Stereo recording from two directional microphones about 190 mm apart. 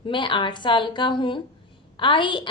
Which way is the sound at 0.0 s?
25° left (ahead or behind).